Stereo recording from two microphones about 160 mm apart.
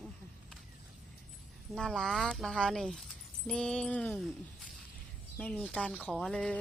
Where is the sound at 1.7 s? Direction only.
5° left (ahead or behind).